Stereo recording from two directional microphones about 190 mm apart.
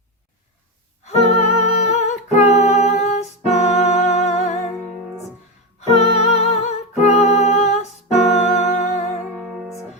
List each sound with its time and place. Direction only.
1.4 s humming: 35° left (ahead or behind)
5.9 s music: 35° left (ahead or behind)